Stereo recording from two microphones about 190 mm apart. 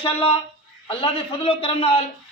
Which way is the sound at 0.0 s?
30° left (ahead or behind).